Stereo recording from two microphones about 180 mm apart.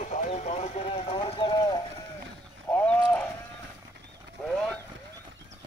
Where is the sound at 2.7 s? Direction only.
10° left (ahead or behind).